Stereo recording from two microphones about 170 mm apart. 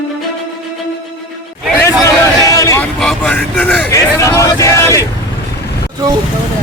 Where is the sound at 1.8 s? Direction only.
20° left (ahead or behind).